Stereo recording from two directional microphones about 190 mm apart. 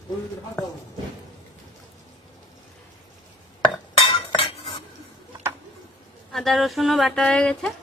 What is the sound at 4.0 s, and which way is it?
Cutlery, 30° left (ahead or behind).